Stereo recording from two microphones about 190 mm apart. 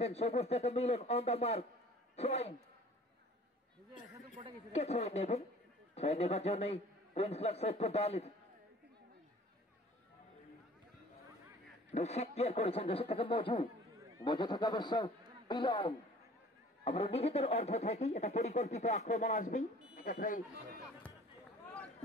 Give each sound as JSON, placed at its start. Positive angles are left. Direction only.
{"t": 0.0, "sound": "speech", "side_deg": 35}
{"t": 4.7, "sound": "speech", "side_deg": 35}
{"t": 11.9, "sound": "a man's voice", "side_deg": 35}